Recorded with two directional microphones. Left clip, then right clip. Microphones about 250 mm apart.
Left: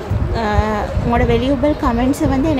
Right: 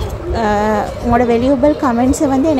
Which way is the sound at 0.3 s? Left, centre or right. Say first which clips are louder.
Right 4 dB; right.